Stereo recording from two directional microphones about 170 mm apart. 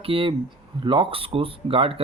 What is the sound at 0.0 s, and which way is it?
Speech, 30° right (ahead or behind).